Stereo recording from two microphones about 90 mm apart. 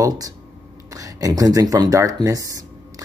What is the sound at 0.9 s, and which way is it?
Speech, 40° right (ahead or behind).